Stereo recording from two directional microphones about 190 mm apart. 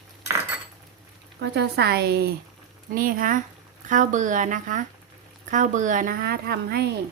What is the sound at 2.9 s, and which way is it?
A woman's voice, 45° right (ahead or behind).